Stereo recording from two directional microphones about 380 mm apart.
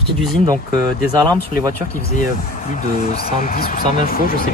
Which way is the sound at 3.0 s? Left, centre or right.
Centre.